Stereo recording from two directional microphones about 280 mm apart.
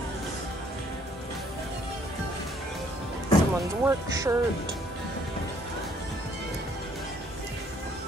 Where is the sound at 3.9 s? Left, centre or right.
Centre.